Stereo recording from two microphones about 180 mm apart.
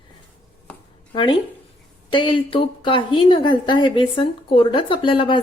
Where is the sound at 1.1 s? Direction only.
25° left (ahead or behind).